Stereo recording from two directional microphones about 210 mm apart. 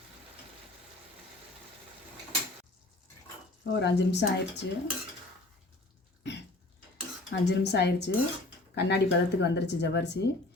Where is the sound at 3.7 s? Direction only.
55° left (ahead or behind).